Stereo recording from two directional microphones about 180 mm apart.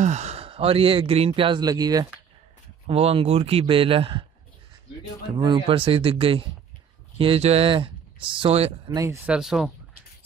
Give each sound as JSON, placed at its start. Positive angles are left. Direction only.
{"t": 0.0, "sound": "speech", "side_deg": -40}
{"t": 2.9, "sound": "a man's voice", "side_deg": -35}
{"t": 5.4, "sound": "speech", "side_deg": -30}
{"t": 8.8, "sound": "speech", "side_deg": -20}
{"t": 9.3, "sound": "speech", "side_deg": 0}